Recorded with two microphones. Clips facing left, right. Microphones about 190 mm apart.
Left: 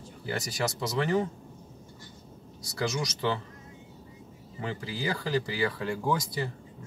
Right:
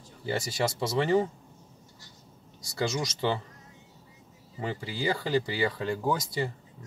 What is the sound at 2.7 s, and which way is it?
Speech, 25° right (ahead or behind).